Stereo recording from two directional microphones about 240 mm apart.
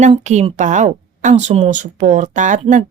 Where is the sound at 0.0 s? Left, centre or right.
Right.